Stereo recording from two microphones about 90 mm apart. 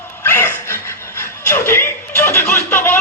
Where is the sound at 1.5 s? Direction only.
25° left (ahead or behind).